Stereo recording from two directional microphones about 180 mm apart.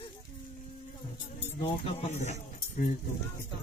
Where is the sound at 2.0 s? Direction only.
40° left (ahead or behind).